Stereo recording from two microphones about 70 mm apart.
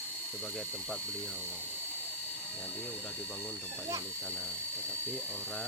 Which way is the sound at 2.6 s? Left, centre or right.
Centre.